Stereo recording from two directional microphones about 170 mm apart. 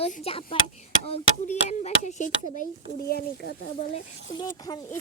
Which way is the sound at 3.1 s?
70° left (ahead or behind).